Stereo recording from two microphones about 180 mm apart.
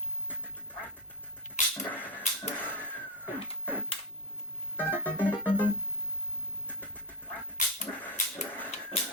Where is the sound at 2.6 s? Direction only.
10° left (ahead or behind).